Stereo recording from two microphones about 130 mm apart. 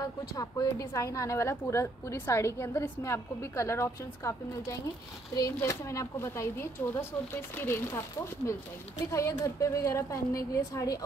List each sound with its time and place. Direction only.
0.0 s a woman's voice: 30° left (ahead or behind)
9.1 s a woman's voice: 25° left (ahead or behind)